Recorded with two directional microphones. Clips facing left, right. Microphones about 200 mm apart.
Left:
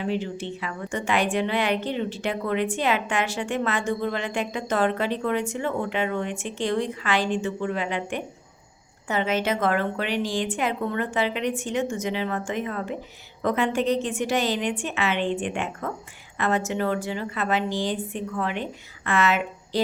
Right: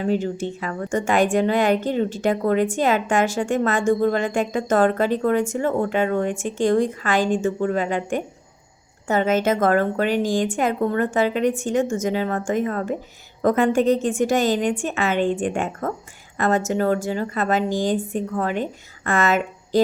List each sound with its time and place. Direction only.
0.0 s a woman's voice: 45° right (ahead or behind)